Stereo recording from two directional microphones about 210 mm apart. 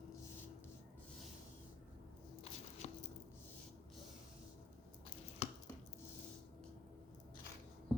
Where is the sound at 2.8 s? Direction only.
30° left (ahead or behind).